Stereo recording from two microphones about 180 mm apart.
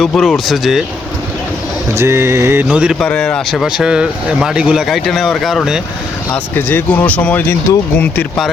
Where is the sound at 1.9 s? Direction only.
15° right (ahead or behind).